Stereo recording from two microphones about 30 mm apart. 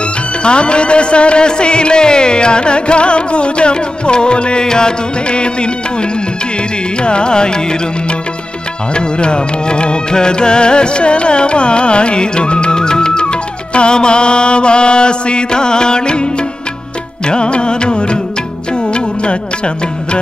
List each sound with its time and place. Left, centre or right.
0.4 s music: left
4.6 s music: left
5.3 s music: left
7.0 s music: left
8.9 s music: left
17.3 s music: left